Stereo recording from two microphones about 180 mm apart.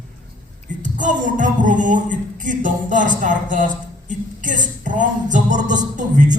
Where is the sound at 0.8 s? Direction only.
45° right (ahead or behind).